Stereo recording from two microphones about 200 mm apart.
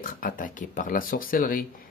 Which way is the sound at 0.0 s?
45° left (ahead or behind).